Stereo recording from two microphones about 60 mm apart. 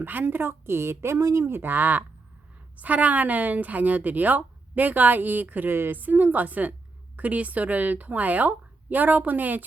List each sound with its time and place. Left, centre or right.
0.0 s a woman's voice: right